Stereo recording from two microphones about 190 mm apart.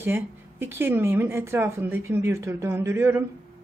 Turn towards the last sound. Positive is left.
turn(degrees=-10)  # may be behind; listen again after turning